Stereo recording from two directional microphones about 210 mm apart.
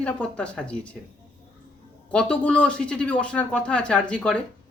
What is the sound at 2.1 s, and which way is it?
Speech, 5° left (ahead or behind).